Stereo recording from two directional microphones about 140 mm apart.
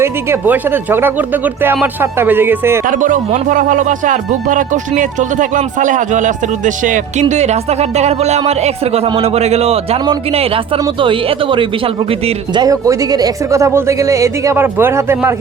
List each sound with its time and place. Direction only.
0.0 s speech: 15° right (ahead or behind)
2.8 s speech: 70° right (ahead or behind); by 11.7 s 40° right (ahead or behind)
12.6 s speech: 25° right (ahead or behind)